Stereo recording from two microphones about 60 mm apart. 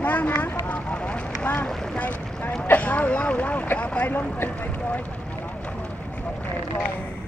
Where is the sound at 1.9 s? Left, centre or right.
Left.